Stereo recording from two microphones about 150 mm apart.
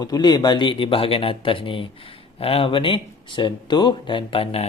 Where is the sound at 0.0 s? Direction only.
25° left (ahead or behind).